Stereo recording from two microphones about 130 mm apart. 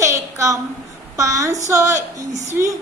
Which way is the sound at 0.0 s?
25° right (ahead or behind).